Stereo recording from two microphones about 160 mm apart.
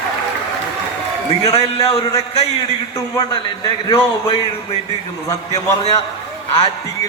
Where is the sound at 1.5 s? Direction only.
40° left (ahead or behind).